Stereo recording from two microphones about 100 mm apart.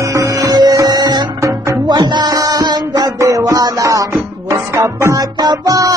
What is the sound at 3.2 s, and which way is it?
Music, 30° right (ahead or behind).